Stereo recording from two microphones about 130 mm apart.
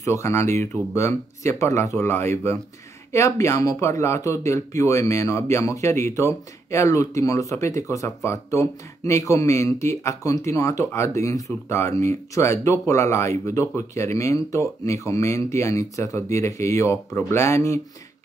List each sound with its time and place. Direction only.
0.0 s speech: 20° left (ahead or behind)